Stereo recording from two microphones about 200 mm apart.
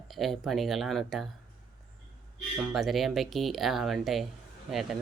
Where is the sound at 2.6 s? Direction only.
Centre (ahead or behind).